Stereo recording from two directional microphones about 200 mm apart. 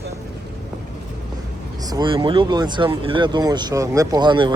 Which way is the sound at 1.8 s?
20° right (ahead or behind).